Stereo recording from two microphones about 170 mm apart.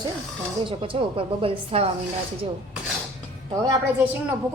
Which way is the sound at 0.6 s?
35° right (ahead or behind).